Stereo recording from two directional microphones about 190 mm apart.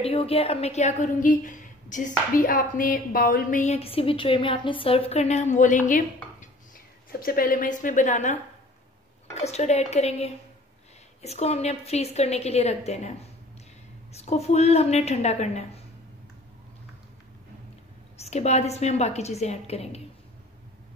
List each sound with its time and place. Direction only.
0.0 s a woman's voice: 30° left (ahead or behind)
14.1 s a woman's voice: 35° left (ahead or behind)
18.1 s a woman's voice: 35° left (ahead or behind)